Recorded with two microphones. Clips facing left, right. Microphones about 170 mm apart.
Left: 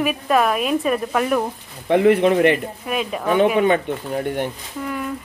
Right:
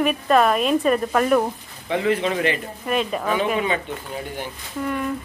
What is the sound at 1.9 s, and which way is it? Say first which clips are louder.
Speech: left 7 dB; 60° left (ahead or behind).